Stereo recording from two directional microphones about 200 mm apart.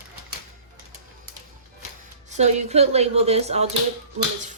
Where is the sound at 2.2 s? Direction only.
35° right (ahead or behind).